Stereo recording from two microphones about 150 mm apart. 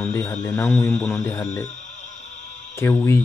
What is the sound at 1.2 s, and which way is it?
Speech, 20° left (ahead or behind).